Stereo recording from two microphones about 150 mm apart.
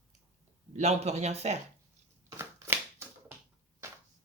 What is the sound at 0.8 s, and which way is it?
Speech, 45° right (ahead or behind).